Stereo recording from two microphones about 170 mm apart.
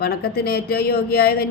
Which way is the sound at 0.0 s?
65° left (ahead or behind).